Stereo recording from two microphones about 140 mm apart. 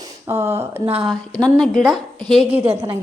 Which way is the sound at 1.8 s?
Centre (ahead or behind).